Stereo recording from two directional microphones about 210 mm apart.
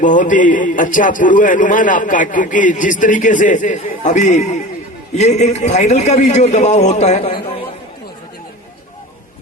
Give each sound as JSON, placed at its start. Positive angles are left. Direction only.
{"t": 0.0, "sound": "a man's voice", "side_deg": 40}